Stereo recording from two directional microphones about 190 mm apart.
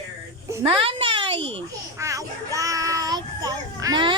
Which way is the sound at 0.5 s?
25° right (ahead or behind).